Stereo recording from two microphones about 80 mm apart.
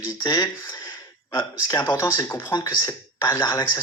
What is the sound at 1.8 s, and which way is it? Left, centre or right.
Speech, left.